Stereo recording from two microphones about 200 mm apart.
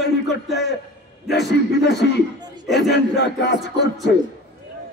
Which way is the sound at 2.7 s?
60° left (ahead or behind).